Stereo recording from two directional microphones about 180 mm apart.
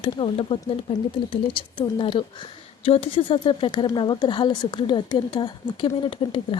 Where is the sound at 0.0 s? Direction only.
30° left (ahead or behind).